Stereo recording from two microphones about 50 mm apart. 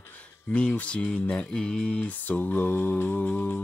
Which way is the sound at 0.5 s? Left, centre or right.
Left.